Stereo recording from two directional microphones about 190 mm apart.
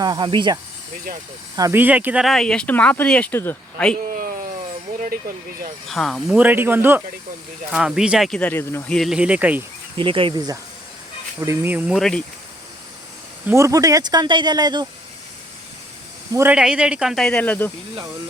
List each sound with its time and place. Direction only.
0.0 s speech: 25° right (ahead or behind); by 3.9 s 10° left (ahead or behind)
4.1 s a sound: 45° right (ahead or behind)
5.9 s speech: centre (ahead or behind)
9.0 s speech: 5° right (ahead or behind)
10.0 s speech: 25° right (ahead or behind); by 11.9 s 10° right (ahead or behind)
11.9 s speech: 5° left (ahead or behind)
13.5 s speech: 15° right (ahead or behind)
16.3 s speech: 10° right (ahead or behind); by 17.7 s 10° left (ahead or behind)